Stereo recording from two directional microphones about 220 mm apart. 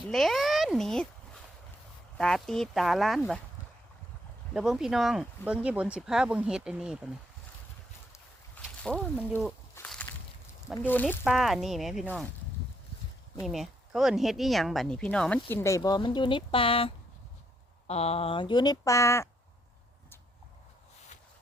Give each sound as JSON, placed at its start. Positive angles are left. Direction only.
{"t": 0.1, "sound": "speech", "side_deg": 0}
{"t": 2.1, "sound": "speech", "side_deg": 0}
{"t": 4.5, "sound": "speech", "side_deg": 0}
{"t": 8.1, "sound": "boat", "side_deg": 5}
{"t": 9.7, "sound": "a sound", "side_deg": 5}
{"t": 10.8, "sound": "speech", "side_deg": 10}
{"t": 11.2, "sound": "speech", "side_deg": -5}
{"t": 13.4, "sound": "speech", "side_deg": 0}